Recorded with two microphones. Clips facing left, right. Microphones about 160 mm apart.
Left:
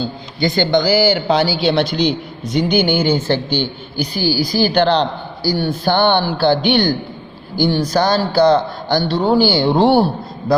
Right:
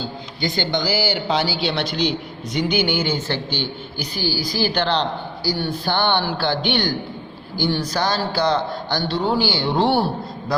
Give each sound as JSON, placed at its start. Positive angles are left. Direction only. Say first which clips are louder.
{"t": 0.3, "sound": "speech", "louder": "left 8 dB", "side_deg": 55}
{"t": 2.5, "sound": "speech", "louder": "left 5 dB", "side_deg": 30}
{"t": 4.2, "sound": "speech", "louder": "left 6 dB", "side_deg": 10}
{"t": 4.6, "sound": "speech", "louder": "left 6 dB", "side_deg": 45}
{"t": 6.3, "sound": "speech", "louder": "left 7 dB", "side_deg": 40}
{"t": 7.9, "sound": "speech", "louder": "left 7 dB", "side_deg": 40}